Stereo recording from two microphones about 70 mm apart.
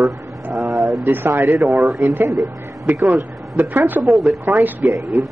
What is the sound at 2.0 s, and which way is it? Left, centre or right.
Speech, right.